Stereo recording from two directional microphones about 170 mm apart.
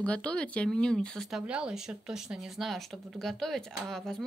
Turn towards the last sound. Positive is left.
turn(degrees=5)  # may be behind; listen again after turning